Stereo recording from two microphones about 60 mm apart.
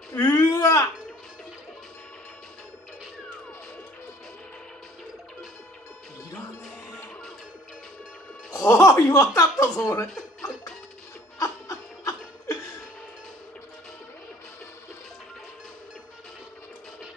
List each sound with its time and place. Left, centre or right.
0.2 s a sound: left
8.5 s speech: left
11.3 s laughter: left